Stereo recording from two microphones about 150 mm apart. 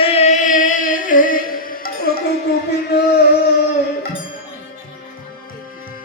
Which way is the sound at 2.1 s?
80° left.